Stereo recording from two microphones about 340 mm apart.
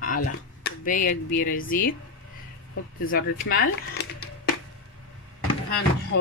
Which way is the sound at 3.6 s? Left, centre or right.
Left.